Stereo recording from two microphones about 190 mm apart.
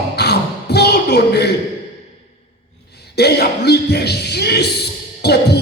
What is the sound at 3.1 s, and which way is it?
Music, 60° left (ahead or behind).